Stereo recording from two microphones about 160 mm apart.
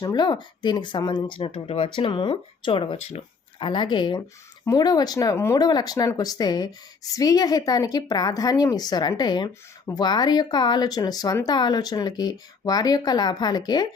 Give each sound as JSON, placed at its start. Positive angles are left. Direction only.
{"t": 0.0, "sound": "speech", "side_deg": 25}